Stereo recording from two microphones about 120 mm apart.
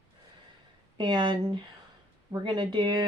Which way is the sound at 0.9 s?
40° right (ahead or behind).